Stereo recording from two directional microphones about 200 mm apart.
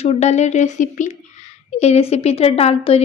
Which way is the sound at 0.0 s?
35° left (ahead or behind).